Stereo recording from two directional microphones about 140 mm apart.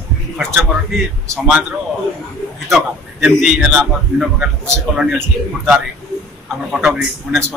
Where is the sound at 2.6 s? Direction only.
Centre (ahead or behind).